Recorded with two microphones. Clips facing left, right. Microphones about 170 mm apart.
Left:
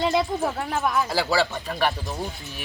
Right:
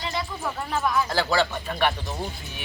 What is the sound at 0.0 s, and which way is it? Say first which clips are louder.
Speech: left 9 dB; 60° left (ahead or behind).